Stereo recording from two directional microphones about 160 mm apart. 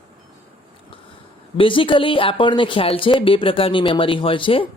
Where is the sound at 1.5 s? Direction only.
35° left (ahead or behind).